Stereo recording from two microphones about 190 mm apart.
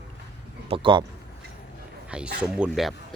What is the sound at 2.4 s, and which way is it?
Speech, 5° right (ahead or behind).